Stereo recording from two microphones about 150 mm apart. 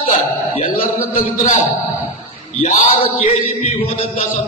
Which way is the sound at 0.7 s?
65° left (ahead or behind).